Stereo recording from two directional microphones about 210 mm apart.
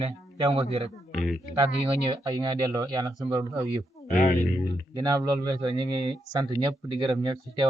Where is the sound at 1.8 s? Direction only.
15° right (ahead or behind).